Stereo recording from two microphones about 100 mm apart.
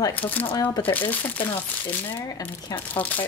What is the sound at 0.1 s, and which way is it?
Speech, 15° left (ahead or behind).